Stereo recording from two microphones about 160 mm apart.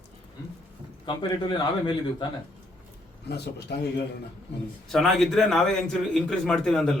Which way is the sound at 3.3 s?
90° left.